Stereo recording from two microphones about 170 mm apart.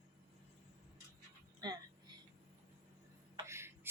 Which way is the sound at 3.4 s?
15° right (ahead or behind).